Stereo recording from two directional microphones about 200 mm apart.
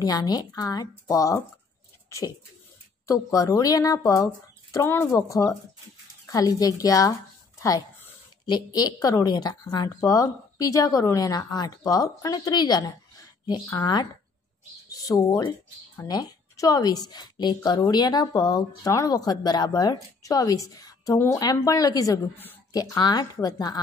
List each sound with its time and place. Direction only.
0.0 s a woman's voice: 20° left (ahead or behind)
2.0 s a sound: 15° left (ahead or behind)
3.1 s a woman's voice: 15° left (ahead or behind)
8.5 s a woman's voice: 20° left (ahead or behind)